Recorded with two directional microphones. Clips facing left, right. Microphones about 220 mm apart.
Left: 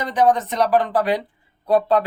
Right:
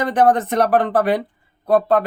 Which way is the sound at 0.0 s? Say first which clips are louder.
Right 2 dB; 55° right (ahead or behind).